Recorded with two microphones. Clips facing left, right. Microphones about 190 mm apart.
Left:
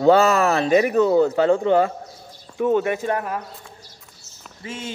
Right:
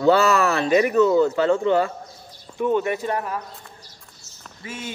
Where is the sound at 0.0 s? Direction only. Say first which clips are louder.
Left 2 dB; 40° left (ahead or behind).